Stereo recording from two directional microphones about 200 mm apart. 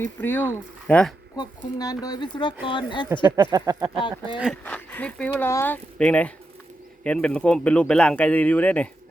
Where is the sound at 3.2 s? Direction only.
15° right (ahead or behind).